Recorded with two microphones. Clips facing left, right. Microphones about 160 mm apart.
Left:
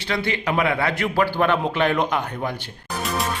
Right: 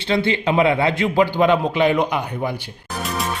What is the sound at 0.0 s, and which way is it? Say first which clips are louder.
A man's voice: right 5 dB; 25° right (ahead or behind).